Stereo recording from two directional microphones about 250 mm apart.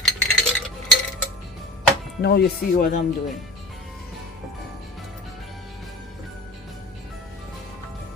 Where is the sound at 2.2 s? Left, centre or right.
Left.